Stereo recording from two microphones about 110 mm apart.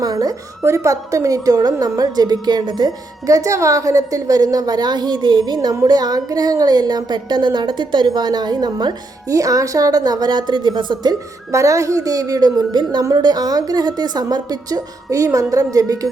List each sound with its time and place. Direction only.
0.0 s a woman's voice: 35° right (ahead or behind)
0.6 s a woman's voice: 25° right (ahead or behind)